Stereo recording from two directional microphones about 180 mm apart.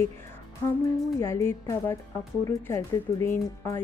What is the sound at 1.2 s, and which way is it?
Speech, 15° left (ahead or behind).